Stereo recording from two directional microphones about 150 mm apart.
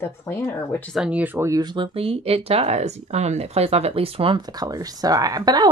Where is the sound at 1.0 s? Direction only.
10° right (ahead or behind).